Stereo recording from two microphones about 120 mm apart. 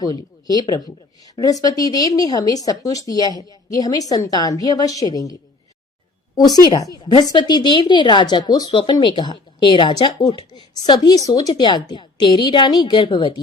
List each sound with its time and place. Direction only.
0.0 s a woman's voice: 35° left (ahead or behind)